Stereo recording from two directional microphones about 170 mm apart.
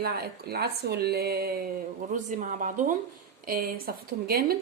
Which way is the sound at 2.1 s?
50° right (ahead or behind).